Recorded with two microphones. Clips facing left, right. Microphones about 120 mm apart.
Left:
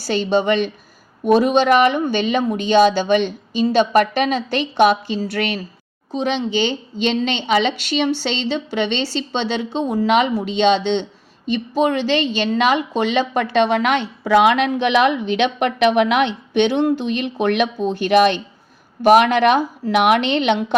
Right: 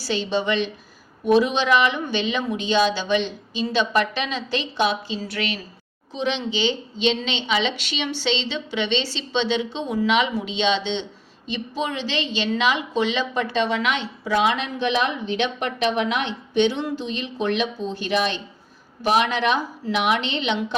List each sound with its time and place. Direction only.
0.0 s a woman's voice: 50° left (ahead or behind)